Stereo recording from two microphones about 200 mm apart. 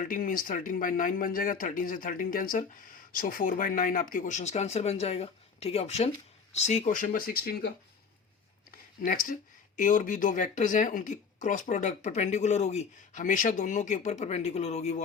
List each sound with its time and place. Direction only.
0.0 s speech: 45° left (ahead or behind)
9.0 s speech: 45° left (ahead or behind)